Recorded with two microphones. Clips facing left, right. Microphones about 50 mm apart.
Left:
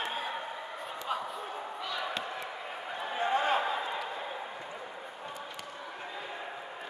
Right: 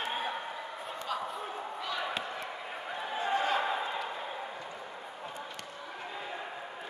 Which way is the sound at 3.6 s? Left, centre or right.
Centre.